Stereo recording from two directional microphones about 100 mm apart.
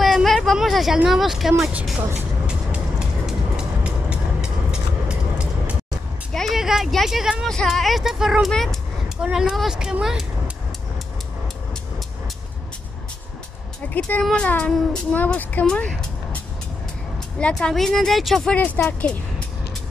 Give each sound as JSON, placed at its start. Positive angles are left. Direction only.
{"t": 0.0, "sound": "a woman's voice", "side_deg": 0}
{"t": 2.4, "sound": "vehicle", "side_deg": -10}
{"t": 6.3, "sound": "speech", "side_deg": 0}
{"t": 13.8, "sound": "speech", "side_deg": 15}
{"t": 17.4, "sound": "speech", "side_deg": 10}
{"t": 18.6, "sound": "speech", "side_deg": 20}